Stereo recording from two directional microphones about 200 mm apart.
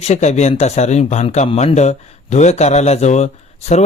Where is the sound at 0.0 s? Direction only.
35° left (ahead or behind).